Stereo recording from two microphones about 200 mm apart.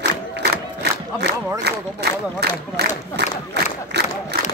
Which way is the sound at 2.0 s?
55° right (ahead or behind).